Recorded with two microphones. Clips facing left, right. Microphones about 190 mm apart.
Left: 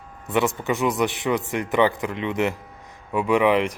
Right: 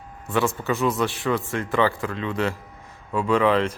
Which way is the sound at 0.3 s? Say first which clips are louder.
Left 1 dB; 20° left (ahead or behind).